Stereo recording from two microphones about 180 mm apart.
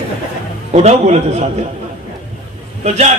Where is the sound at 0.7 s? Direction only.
35° right (ahead or behind).